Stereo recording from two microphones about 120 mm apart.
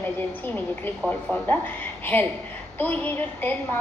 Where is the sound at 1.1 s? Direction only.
10° left (ahead or behind).